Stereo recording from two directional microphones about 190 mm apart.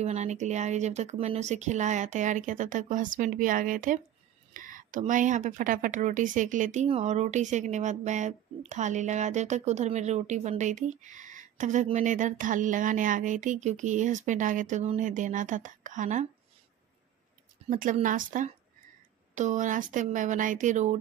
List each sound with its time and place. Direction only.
0.0 s speech: 35° right (ahead or behind)
17.6 s speech: 45° right (ahead or behind)